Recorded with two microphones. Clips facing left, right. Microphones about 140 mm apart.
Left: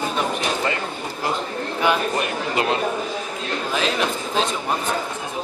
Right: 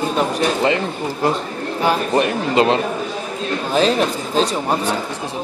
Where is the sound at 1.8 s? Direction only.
30° right (ahead or behind).